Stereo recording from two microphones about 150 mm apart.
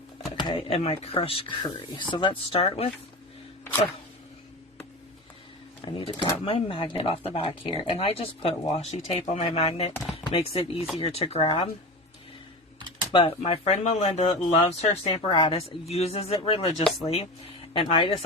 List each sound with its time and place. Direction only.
0.3 s speech: 35° left (ahead or behind)
5.8 s speech: 30° left (ahead or behind)
13.1 s speech: 40° left (ahead or behind)
17.7 s speech: 35° left (ahead or behind)